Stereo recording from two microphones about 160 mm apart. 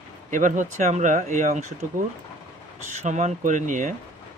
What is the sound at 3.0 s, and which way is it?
Speech, 50° right (ahead or behind).